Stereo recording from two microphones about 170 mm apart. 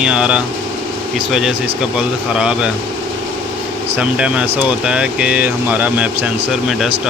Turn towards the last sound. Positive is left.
turn(degrees=-10)  # may be behind; listen again after turning